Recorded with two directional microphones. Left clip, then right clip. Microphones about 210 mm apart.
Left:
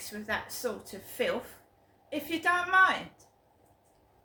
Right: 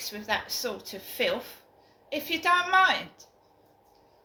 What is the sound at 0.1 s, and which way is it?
A woman's voice, 15° left (ahead or behind).